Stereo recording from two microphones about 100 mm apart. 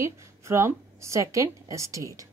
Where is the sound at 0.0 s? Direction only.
30° right (ahead or behind).